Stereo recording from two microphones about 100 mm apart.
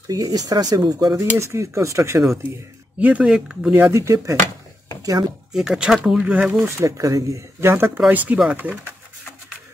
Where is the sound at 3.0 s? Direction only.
15° right (ahead or behind).